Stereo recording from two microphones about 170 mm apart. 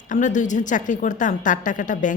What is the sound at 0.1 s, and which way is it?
Speech, 45° left (ahead or behind).